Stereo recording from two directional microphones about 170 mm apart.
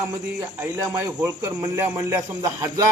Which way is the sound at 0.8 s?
20° right (ahead or behind).